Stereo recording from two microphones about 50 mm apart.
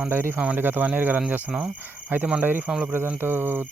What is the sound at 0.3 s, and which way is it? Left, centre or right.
Speech, right.